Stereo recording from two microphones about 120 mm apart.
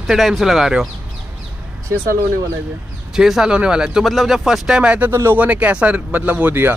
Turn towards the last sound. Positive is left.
turn(degrees=-15)  # may be behind; listen again after turning